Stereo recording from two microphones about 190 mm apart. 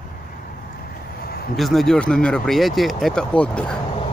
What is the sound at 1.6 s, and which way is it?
Speech, centre (ahead or behind).